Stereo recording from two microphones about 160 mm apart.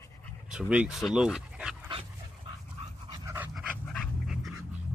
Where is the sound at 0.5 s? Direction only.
5° right (ahead or behind).